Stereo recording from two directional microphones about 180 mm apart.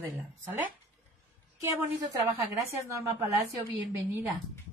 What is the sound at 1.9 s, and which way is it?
A woman's voice, 20° right (ahead or behind).